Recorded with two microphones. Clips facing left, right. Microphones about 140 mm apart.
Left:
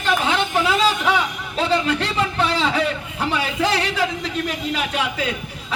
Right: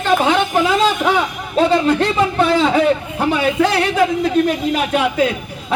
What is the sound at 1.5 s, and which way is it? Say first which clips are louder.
A man's voice: right 7 dB; 50° right (ahead or behind).